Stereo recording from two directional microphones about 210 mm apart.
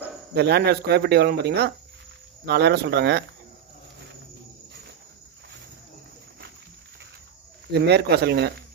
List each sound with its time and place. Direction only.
0.3 s speech: 50° right (ahead or behind)
7.7 s speech: 50° right (ahead or behind)